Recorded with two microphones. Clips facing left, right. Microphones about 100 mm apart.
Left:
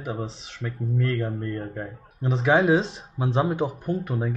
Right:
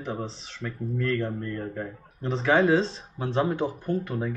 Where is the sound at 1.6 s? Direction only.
10° left (ahead or behind).